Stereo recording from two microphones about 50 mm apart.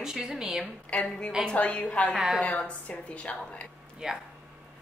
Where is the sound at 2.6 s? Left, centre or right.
Left.